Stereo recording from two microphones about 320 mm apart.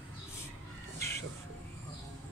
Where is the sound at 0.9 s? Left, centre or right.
Centre.